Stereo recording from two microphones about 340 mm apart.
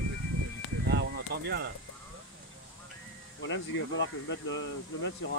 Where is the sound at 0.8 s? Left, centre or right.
Right.